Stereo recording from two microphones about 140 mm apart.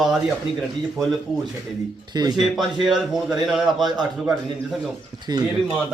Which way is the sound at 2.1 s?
30° right (ahead or behind).